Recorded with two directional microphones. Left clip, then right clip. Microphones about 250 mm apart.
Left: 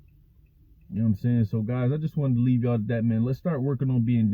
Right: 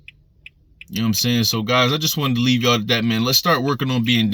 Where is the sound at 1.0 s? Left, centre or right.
Right.